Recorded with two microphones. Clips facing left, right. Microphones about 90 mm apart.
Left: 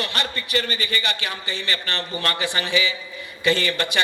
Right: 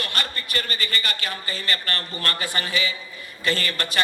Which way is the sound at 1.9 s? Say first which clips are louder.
Left 3 dB; 25° left (ahead or behind).